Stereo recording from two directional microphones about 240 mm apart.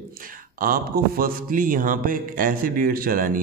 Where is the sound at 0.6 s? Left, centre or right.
Right.